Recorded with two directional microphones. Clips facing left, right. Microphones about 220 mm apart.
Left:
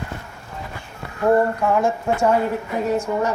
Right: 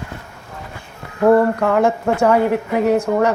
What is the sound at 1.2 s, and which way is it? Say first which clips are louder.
Speech: right 4 dB; 65° right (ahead or behind).